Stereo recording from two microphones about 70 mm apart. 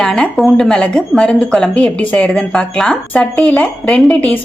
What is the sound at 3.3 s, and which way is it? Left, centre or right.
Speech, centre.